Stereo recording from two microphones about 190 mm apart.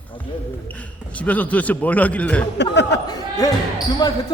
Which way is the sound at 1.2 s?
10° left (ahead or behind).